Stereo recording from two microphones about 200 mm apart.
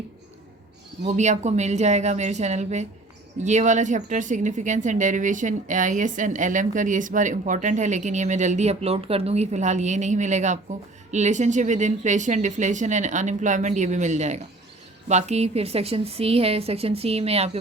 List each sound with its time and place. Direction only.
1.0 s a woman's voice: 35° right (ahead or behind)